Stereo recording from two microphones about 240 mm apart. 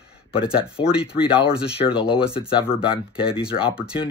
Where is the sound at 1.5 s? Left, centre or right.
Centre.